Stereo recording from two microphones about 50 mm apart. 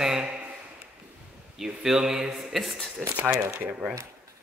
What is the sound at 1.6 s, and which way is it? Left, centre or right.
Speech, centre.